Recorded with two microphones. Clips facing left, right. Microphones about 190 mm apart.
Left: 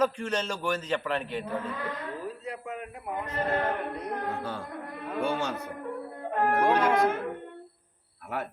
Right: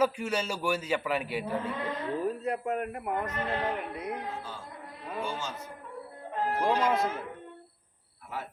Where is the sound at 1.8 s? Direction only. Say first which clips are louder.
Right 2 dB; 25° right (ahead or behind).